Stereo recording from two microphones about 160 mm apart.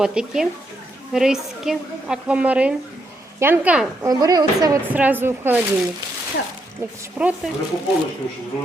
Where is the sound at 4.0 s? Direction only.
25° right (ahead or behind).